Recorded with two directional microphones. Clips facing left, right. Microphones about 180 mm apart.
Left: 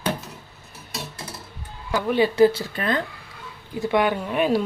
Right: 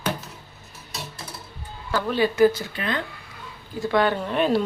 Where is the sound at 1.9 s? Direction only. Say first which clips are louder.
Left 3 dB; 15° left (ahead or behind).